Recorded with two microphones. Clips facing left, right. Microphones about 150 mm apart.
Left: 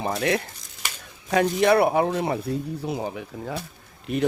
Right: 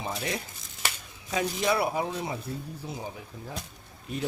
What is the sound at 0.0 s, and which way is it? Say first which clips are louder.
Speech: left 9 dB; 70° left (ahead or behind).